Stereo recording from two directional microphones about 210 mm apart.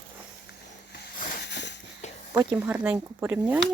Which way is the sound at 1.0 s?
50° left (ahead or behind).